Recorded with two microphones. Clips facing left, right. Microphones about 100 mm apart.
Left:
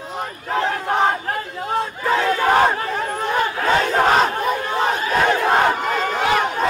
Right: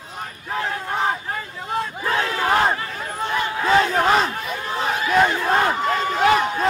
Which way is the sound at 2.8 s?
60° left (ahead or behind).